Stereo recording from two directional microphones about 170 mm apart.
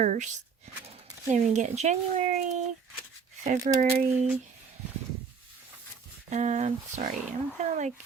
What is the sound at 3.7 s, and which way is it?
Speech, 40° right (ahead or behind).